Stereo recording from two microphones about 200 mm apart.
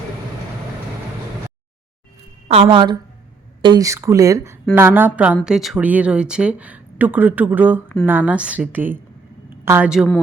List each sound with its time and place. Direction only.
2.5 s a woman's voice: 30° right (ahead or behind); by 10.1 s 5° right (ahead or behind)